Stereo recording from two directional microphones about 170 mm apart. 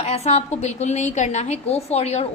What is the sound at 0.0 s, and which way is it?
Speech, 40° left (ahead or behind).